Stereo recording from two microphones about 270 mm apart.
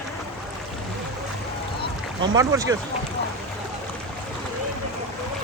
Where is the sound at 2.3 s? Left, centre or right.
Centre.